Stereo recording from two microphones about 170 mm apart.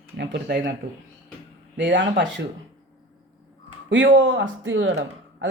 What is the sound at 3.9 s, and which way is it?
Speech, 90° right.